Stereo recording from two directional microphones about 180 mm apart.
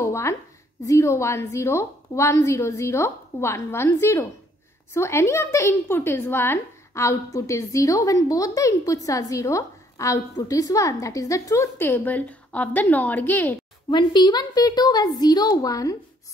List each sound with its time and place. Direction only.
0.0 s a sound: 15° left (ahead or behind)
0.8 s a woman's voice: 15° left (ahead or behind)
13.8 s a woman's voice: 25° left (ahead or behind)